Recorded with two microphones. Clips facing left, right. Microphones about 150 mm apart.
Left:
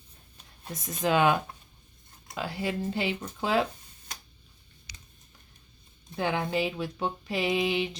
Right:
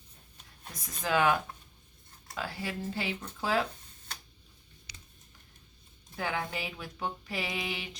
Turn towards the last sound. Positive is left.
turn(degrees=25)  # may be behind; listen again after turning